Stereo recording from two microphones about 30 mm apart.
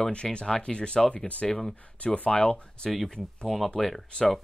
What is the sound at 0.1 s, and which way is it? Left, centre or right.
Speech, left.